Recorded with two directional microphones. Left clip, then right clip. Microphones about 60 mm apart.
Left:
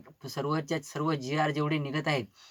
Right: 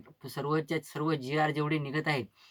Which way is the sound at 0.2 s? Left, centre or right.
Centre.